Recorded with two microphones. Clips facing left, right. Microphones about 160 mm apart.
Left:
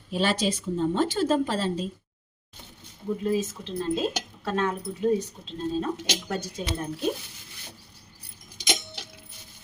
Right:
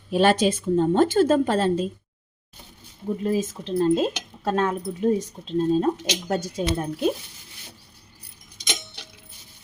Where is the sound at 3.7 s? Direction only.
45° right (ahead or behind).